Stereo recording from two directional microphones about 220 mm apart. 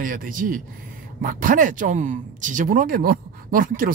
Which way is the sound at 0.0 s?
40° right (ahead or behind).